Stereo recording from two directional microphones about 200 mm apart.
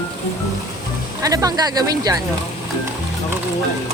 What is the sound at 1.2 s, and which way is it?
Speech, 15° right (ahead or behind).